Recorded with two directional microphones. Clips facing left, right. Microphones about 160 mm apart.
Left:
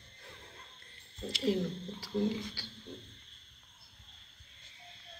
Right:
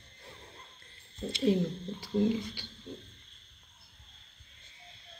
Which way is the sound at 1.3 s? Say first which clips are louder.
Right 4 dB; 20° right (ahead or behind).